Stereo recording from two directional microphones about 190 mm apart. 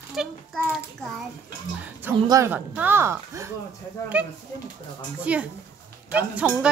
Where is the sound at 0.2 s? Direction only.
Centre (ahead or behind).